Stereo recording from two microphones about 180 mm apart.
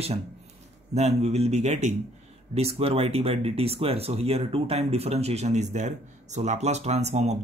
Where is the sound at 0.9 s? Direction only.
40° right (ahead or behind).